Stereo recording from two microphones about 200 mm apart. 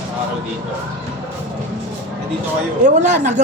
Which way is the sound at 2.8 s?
35° right (ahead or behind).